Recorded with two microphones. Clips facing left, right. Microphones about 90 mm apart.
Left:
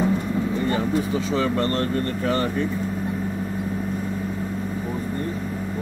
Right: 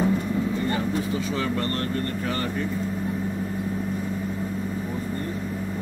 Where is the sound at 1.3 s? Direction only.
25° left (ahead or behind).